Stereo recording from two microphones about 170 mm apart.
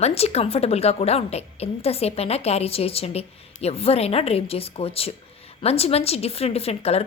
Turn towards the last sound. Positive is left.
turn(degrees=35)  # may be behind; listen again after turning